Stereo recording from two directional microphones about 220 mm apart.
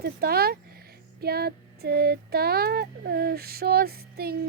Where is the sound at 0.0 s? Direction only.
45° right (ahead or behind).